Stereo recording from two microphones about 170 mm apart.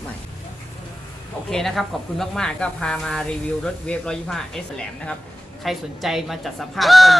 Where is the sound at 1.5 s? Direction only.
Centre (ahead or behind).